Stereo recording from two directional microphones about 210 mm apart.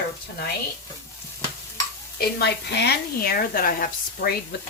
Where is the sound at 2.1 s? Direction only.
50° left (ahead or behind).